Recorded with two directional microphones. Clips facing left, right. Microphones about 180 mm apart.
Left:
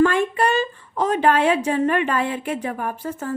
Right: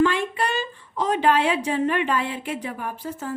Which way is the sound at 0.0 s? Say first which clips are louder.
Left 4 dB; 50° left (ahead or behind).